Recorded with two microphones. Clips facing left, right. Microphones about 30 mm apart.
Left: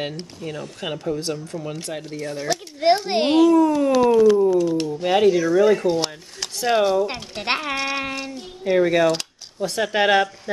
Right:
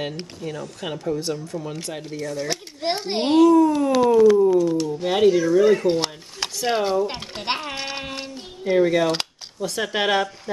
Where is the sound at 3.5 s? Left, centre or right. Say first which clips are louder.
Even; centre.